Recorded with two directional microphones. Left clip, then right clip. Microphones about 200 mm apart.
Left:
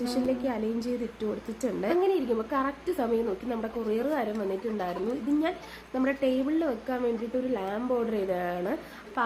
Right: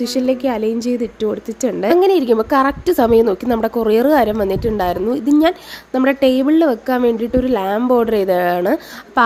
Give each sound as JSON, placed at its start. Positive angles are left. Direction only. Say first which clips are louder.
{"t": 0.0, "sound": "a woman's voice", "louder": "right 12 dB", "side_deg": -40}